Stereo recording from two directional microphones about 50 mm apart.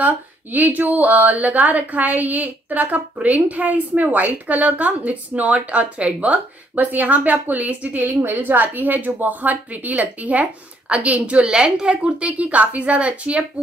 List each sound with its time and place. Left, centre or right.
0.0 s speech: right
8.1 s speech: right
11.4 s a woman's voice: centre